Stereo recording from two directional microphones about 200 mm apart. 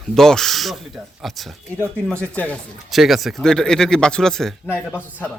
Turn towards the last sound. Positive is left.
turn(degrees=10)  # may be behind; listen again after turning